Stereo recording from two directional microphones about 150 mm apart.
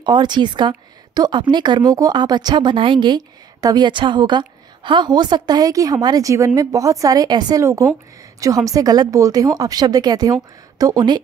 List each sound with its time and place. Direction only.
0.0 s a woman's voice: 30° right (ahead or behind)